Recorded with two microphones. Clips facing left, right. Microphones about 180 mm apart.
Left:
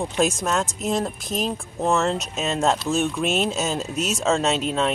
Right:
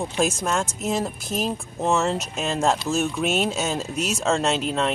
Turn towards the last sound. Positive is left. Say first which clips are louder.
# left 1 dB
turn(degrees=0)  # may be behind; listen again after turning